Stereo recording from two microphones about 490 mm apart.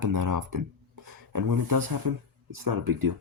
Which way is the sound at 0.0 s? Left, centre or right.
Right.